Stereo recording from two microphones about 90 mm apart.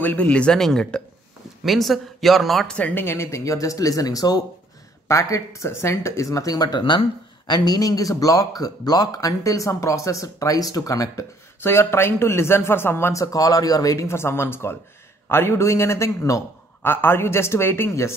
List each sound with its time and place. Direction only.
0.0 s speech: 20° left (ahead or behind); by 2.8 s centre (ahead or behind)
2.8 s speech: 20° left (ahead or behind); by 6.8 s 45° left (ahead or behind)
6.8 s speech: 65° left (ahead or behind); by 13.2 s 25° left (ahead or behind)
13.2 s speech: 40° left (ahead or behind)
16.8 s speech: 25° left (ahead or behind)